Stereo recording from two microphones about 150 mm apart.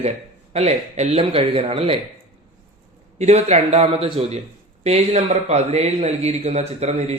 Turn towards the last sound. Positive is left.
turn(degrees=-45)  # may be behind; listen again after turning